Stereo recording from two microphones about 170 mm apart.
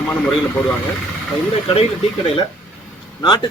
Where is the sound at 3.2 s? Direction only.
25° left (ahead or behind).